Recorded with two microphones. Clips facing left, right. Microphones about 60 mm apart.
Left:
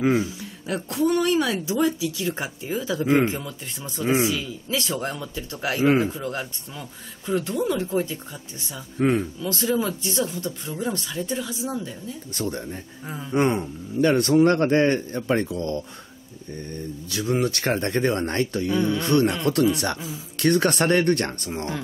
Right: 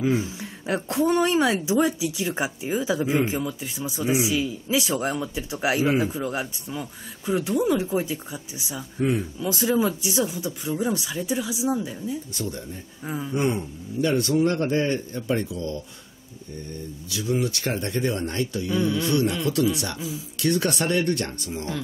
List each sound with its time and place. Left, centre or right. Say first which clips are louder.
0.4 s speech: right 2 dB; right; by 4.0 s centre
4.0 s speech: left 2 dB; left
4.3 s speech: right 3 dB; centre
12.4 s speech: left 3 dB; left
13.0 s a sound: right 6 dB; centre
13.3 s speech: left 4 dB; left
17.1 s speech: left 2 dB; left
18.7 s a sound: even; centre
18.9 s speech: left 2 dB; left